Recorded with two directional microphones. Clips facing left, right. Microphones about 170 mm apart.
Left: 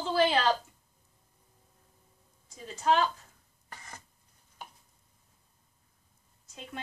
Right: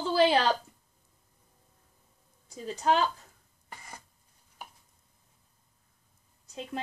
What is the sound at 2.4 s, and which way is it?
Speech, 35° right (ahead or behind).